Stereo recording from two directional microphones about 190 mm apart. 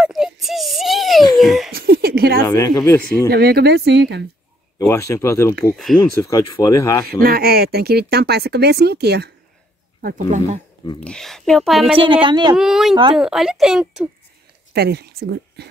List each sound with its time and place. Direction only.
0.0 s a sound: centre (ahead or behind)
1.3 s giggle: centre (ahead or behind)
1.7 s a sound: 55° right (ahead or behind)
2.4 s speech: 15° left (ahead or behind)
3.3 s speech: 55° right (ahead or behind)
4.7 s speech: 15° left (ahead or behind)
5.9 s a woman's voice: centre (ahead or behind)
6.2 s speech: 15° left (ahead or behind)
7.1 s speech: 50° right (ahead or behind)
10.0 s speech: 40° right (ahead or behind)
11.0 s a woman's voice: 5° left (ahead or behind)
12.0 s a woman's voice: 25° right (ahead or behind)
12.5 s a woman's voice: centre (ahead or behind)
14.7 s speech: 55° right (ahead or behind)